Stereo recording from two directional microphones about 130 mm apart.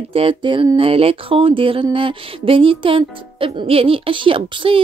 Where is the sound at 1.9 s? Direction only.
45° right (ahead or behind).